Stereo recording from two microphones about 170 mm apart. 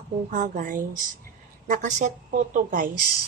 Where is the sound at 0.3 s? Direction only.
50° right (ahead or behind).